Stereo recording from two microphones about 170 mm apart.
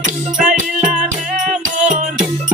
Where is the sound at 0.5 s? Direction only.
50° right (ahead or behind).